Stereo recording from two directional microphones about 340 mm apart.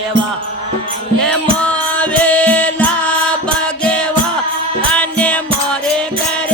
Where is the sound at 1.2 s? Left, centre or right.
Centre.